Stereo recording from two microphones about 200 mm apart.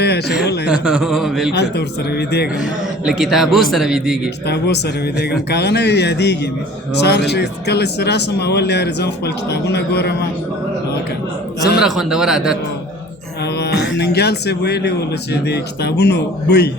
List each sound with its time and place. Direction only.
0.0 s speech: 55° left (ahead or behind)
0.9 s a man's voice: centre (ahead or behind)
1.5 s speech: 55° left (ahead or behind)
3.0 s a man's voice: centre (ahead or behind)
4.4 s speech: 55° left (ahead or behind)
11.8 s a man's voice: centre (ahead or behind)
13.6 s speech: 55° left (ahead or behind)